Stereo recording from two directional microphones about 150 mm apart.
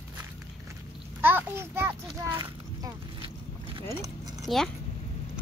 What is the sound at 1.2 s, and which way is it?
A child's voice, 15° right (ahead or behind).